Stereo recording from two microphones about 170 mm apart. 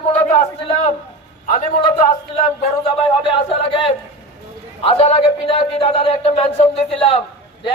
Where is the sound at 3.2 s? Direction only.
30° left (ahead or behind).